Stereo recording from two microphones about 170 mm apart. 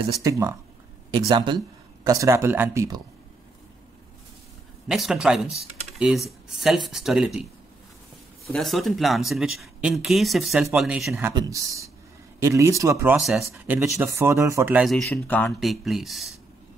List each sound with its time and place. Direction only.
0.2 s speech: 20° right (ahead or behind)
4.8 s speech: centre (ahead or behind)
8.5 s speech: centre (ahead or behind)
11.3 s speech: 20° right (ahead or behind)
13.2 s speech: centre (ahead or behind)
13.7 s speech: 15° right (ahead or behind)
14.9 s speech: 5° left (ahead or behind)
15.6 s speech: centre (ahead or behind)